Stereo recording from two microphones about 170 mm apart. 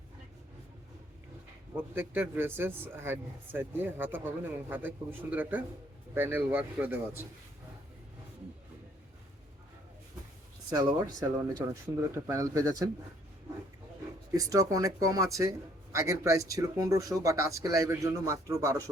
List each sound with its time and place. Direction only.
1.7 s a man's voice: 15° right (ahead or behind)
10.7 s a man's voice: 20° right (ahead or behind)
14.3 s a man's voice: 20° right (ahead or behind)